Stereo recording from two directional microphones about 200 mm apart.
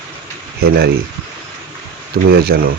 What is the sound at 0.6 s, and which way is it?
Speech, 50° right (ahead or behind).